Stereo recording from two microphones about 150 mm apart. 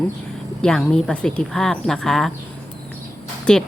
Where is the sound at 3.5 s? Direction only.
5° left (ahead or behind).